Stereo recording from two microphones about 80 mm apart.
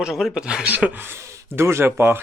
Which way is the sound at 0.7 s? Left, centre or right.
Right.